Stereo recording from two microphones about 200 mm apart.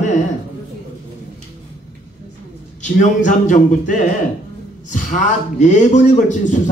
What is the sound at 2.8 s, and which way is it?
A man's voice, 40° left (ahead or behind).